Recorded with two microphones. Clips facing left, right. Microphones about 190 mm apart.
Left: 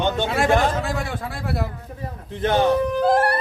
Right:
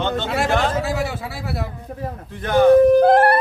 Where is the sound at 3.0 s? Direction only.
60° right (ahead or behind).